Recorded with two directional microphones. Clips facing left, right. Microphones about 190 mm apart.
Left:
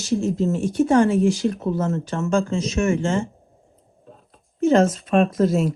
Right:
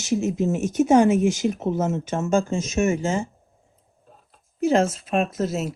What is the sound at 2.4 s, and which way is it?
Speech, 45° right (ahead or behind).